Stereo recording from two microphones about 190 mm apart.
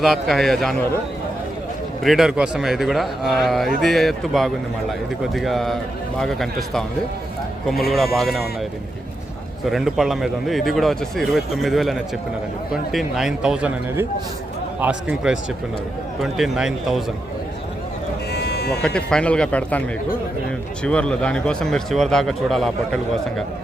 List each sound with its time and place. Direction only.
0.0 s a man's voice: centre (ahead or behind)
2.0 s a man's voice: centre (ahead or behind)
7.9 s a man's voice: centre (ahead or behind)
9.6 s a man's voice: centre (ahead or behind)
18.3 s sheep: 60° left (ahead or behind)
18.9 s speech: 5° left (ahead or behind)
20.8 s a man's voice: 5° left (ahead or behind)